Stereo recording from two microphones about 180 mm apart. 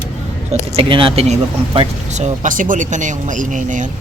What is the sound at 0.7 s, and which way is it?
Speech, 30° right (ahead or behind).